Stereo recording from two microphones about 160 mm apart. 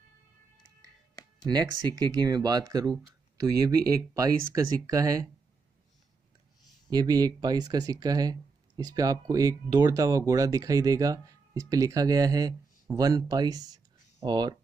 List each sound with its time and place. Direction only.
1.5 s speech: 25° right (ahead or behind)
6.9 s speech: 25° right (ahead or behind)